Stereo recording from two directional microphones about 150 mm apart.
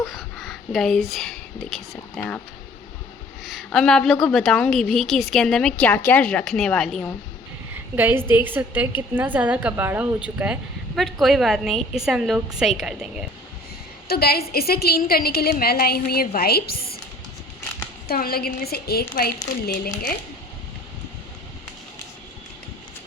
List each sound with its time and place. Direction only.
0.0 s a woman's voice: centre (ahead or behind)
3.4 s a woman's voice: centre (ahead or behind)
7.9 s a woman's voice: 15° right (ahead or behind)
14.1 s a woman's voice: 90° left
18.1 s a woman's voice: 90° left